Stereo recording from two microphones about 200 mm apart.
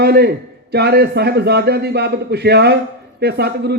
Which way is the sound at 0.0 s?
50° right (ahead or behind).